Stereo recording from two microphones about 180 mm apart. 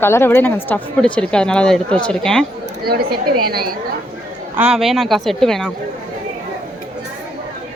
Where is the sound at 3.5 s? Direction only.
55° right (ahead or behind).